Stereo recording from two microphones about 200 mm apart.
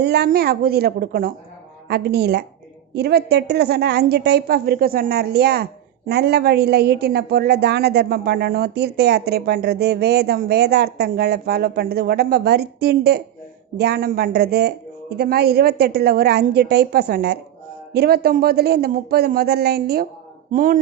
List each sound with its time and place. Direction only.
0.0 s a woman's voice: 55° right (ahead or behind)